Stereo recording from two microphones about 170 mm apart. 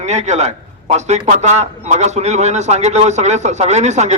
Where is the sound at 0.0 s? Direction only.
45° right (ahead or behind).